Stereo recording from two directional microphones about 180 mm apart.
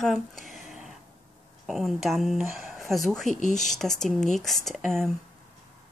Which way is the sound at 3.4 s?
40° left (ahead or behind).